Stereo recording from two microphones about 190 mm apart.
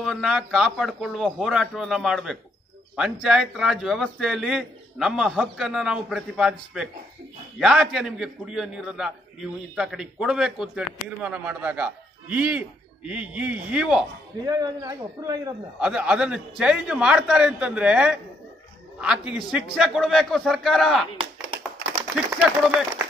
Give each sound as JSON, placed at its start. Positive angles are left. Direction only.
{"t": 0.0, "sound": "a man's voice", "side_deg": 0}
{"t": 14.4, "sound": "a man's voice", "side_deg": -20}
{"t": 15.8, "sound": "a man's voice", "side_deg": -5}
{"t": 22.7, "sound": "a man's voice", "side_deg": -10}